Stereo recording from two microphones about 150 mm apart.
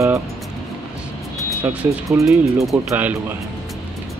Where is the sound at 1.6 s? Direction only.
10° right (ahead or behind).